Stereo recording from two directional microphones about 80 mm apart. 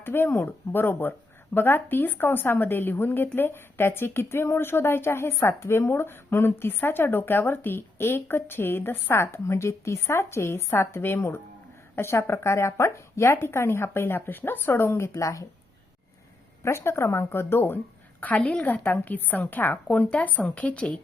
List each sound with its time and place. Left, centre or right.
0.0 s speech: left
16.6 s speech: left
18.3 s a woman's voice: centre